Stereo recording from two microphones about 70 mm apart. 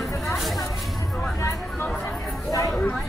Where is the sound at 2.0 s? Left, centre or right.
Left.